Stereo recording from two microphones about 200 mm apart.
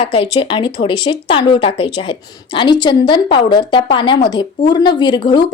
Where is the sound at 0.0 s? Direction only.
25° left (ahead or behind).